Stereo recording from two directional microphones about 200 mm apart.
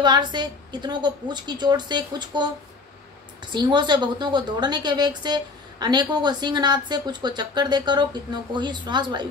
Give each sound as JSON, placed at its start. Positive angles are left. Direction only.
{"t": 0.0, "sound": "a woman's voice", "side_deg": -20}
{"t": 3.5, "sound": "a woman's voice", "side_deg": -20}